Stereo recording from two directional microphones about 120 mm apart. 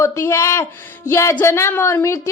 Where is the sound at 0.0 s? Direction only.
25° left (ahead or behind).